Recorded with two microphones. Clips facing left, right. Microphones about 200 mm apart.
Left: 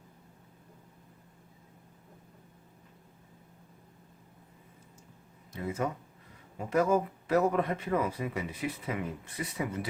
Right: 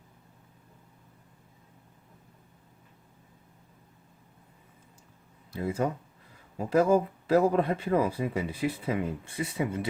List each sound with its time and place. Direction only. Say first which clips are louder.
5.5 s speech: right 4 dB; 30° right (ahead or behind)